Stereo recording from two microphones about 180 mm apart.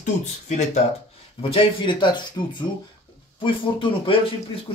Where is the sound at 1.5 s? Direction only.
25° left (ahead or behind).